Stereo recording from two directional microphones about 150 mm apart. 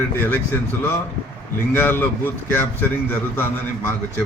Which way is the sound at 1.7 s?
15° left (ahead or behind).